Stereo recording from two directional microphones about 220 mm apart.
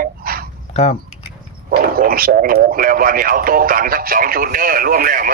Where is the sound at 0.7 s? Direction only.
25° left (ahead or behind).